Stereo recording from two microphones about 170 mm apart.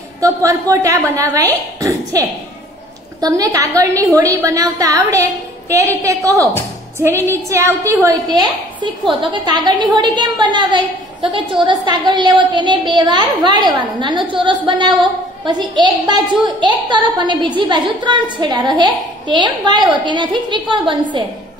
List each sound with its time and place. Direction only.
0.2 s a woman's voice: 20° right (ahead or behind)